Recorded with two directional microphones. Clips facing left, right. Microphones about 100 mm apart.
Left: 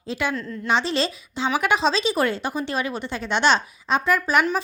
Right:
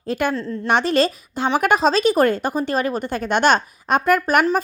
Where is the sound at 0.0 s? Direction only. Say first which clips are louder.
Right 5 dB; 50° right (ahead or behind).